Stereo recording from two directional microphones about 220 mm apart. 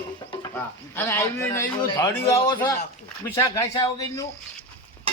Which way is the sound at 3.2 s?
15° left (ahead or behind).